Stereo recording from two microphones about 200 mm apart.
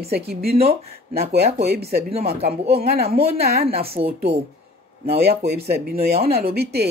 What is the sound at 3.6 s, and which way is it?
Speech, 30° right (ahead or behind).